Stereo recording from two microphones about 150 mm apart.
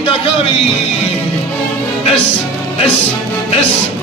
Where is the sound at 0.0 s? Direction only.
40° left (ahead or behind).